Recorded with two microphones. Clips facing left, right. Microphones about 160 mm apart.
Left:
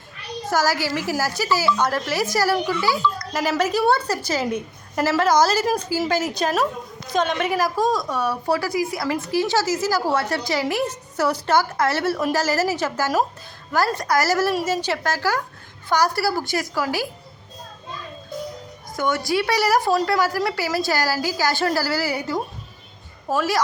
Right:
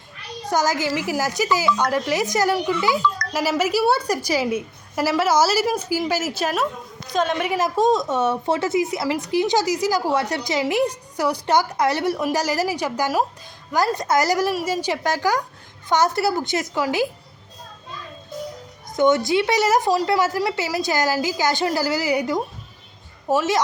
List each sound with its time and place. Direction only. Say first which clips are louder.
0.5 s a woman's voice: right 1 dB; 20° right (ahead or behind)
3.6 s a woman's voice: left 1 dB; 10° right (ahead or behind)
7.6 s a woman's voice: right 6 dB; 25° right (ahead or behind)
18.9 s a woman's voice: right 5 dB; 20° right (ahead or behind)